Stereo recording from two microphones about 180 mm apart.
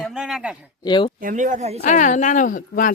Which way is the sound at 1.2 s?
45° right (ahead or behind).